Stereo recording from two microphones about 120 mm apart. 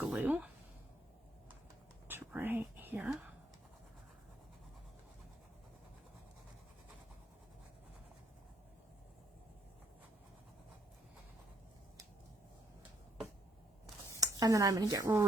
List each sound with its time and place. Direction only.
0.0 s a sound: 10° right (ahead or behind)
2.0 s whispering: 15° right (ahead or behind)
14.2 s speech: 30° right (ahead or behind)